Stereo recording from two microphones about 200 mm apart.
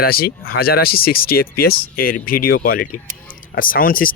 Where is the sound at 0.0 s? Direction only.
50° left (ahead or behind).